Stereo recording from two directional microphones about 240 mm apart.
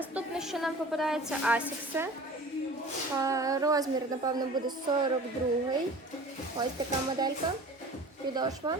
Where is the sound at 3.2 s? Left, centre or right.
Centre.